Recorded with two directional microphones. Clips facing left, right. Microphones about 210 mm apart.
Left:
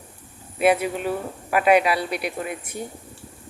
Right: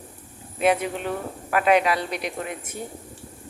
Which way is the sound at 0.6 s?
10° left (ahead or behind).